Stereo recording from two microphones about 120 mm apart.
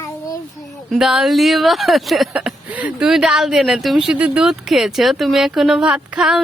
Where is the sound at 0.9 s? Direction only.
5° right (ahead or behind).